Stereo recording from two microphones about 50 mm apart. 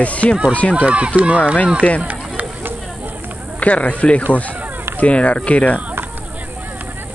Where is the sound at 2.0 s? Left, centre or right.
Right.